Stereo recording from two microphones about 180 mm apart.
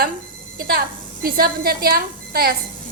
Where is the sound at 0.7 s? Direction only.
55° right (ahead or behind).